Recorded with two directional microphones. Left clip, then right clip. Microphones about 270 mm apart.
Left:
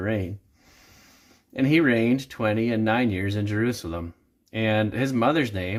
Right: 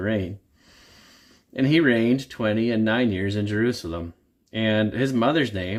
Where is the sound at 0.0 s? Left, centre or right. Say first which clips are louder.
Right 2 dB; centre.